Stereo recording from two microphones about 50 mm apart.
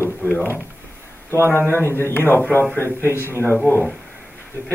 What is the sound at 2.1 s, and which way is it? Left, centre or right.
A man's voice, left.